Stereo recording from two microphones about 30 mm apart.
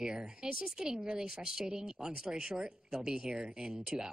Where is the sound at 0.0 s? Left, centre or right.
Right.